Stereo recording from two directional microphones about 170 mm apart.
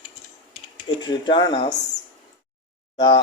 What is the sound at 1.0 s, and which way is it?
Speech, 25° left (ahead or behind).